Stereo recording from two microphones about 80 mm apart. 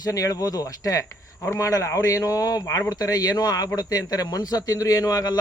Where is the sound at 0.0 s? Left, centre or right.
Left.